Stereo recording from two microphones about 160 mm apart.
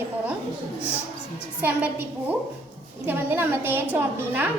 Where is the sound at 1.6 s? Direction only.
10° right (ahead or behind).